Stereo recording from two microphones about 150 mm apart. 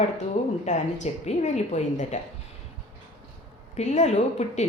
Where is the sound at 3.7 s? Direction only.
50° left (ahead or behind).